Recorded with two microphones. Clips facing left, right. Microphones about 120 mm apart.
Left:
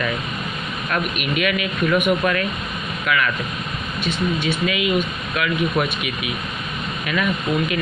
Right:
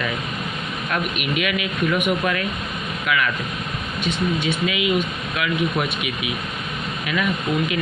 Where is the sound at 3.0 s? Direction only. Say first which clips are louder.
Left 1 dB; 10° right (ahead or behind).